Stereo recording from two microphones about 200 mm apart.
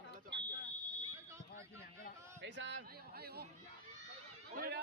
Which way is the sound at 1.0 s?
20° right (ahead or behind).